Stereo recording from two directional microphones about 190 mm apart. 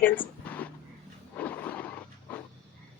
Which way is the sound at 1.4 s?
10° left (ahead or behind).